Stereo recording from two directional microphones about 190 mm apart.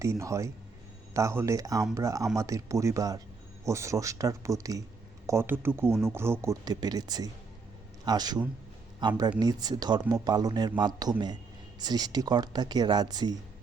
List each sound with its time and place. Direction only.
0.0 s speech: 15° right (ahead or behind)